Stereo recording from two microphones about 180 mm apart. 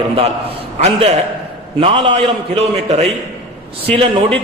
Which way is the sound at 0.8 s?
35° right (ahead or behind).